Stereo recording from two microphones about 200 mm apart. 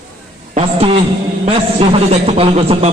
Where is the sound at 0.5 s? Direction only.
30° right (ahead or behind).